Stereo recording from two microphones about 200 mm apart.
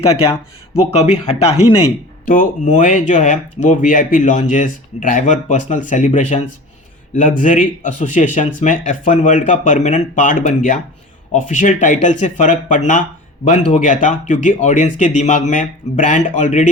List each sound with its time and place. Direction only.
0.0 s speech: 30° left (ahead or behind)
2.2 s speech: 45° left (ahead or behind)